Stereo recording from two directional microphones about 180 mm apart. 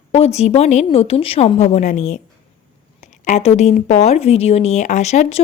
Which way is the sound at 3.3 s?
40° left (ahead or behind).